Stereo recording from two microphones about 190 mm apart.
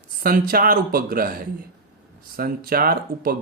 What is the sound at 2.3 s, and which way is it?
Speech, 50° right (ahead or behind).